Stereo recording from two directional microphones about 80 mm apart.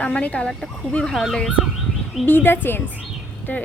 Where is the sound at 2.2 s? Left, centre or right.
Left.